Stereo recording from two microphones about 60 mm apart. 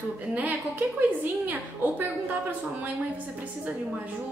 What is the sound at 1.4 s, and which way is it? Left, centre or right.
A woman's voice, right.